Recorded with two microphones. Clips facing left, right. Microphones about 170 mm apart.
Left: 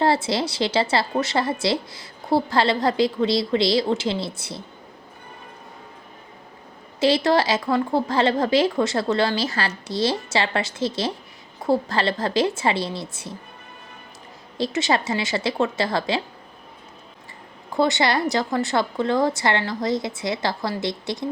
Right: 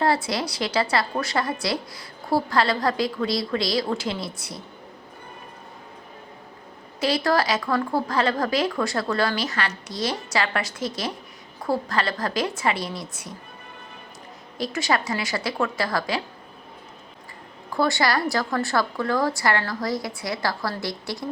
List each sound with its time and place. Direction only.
0.0 s a woman's voice: 25° left (ahead or behind)
7.0 s a woman's voice: 25° left (ahead or behind)
14.6 s a woman's voice: 25° left (ahead or behind)
17.7 s a woman's voice: 20° left (ahead or behind)